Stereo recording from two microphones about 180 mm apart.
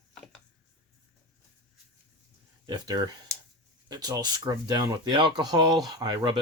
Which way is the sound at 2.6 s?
25° right (ahead or behind).